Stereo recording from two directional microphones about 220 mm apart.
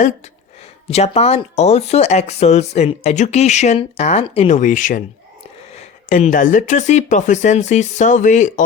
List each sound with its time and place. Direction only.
0.9 s speech: 30° left (ahead or behind)